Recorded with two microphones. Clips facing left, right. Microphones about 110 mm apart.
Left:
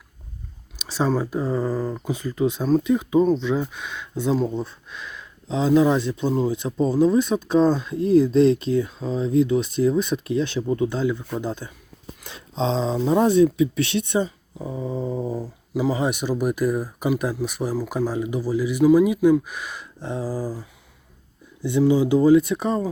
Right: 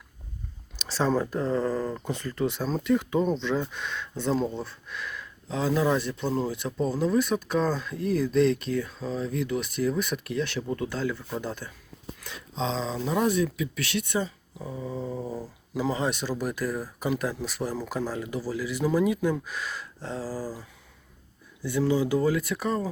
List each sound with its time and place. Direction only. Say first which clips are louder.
0.8 s a sound: left 3 dB; 15° left (ahead or behind)
1.1 s speech: left 2 dB; 10° left (ahead or behind)
21.6 s speech: left 6 dB; 20° left (ahead or behind)